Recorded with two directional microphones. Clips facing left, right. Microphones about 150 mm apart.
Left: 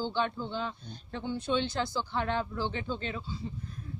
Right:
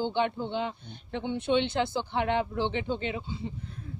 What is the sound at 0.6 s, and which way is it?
Speech, 20° right (ahead or behind).